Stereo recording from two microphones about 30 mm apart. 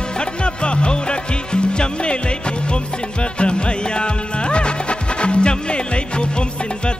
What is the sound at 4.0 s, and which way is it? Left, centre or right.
Music, left.